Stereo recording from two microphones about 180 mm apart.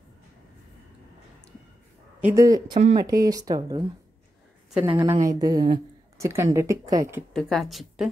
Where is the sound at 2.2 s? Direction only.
15° right (ahead or behind).